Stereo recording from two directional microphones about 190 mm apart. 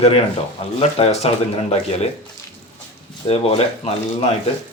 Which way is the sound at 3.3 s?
35° left (ahead or behind).